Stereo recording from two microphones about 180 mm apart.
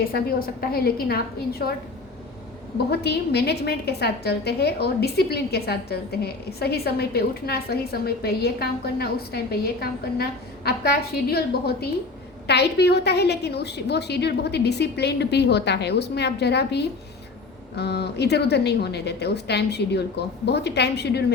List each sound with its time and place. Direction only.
0.1 s a woman's voice: 55° left (ahead or behind)
2.9 s a woman's voice: 65° left (ahead or behind)